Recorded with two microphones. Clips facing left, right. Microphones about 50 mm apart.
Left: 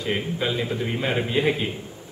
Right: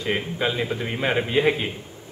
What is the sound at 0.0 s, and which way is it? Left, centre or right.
A man's voice, centre.